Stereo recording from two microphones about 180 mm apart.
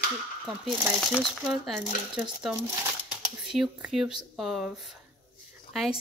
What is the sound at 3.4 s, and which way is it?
A woman's voice, centre (ahead or behind).